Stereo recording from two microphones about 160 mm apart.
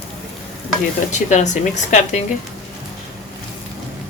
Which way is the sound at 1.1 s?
50° left (ahead or behind).